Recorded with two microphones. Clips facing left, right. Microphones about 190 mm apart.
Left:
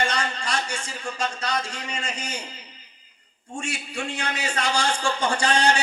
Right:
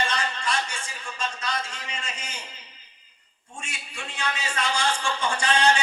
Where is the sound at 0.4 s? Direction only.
30° left (ahead or behind).